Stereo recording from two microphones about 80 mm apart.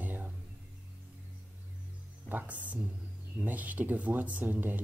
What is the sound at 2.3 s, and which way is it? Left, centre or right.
Speech, right.